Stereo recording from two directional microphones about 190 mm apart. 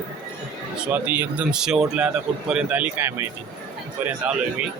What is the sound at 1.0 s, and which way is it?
Speech, 10° right (ahead or behind).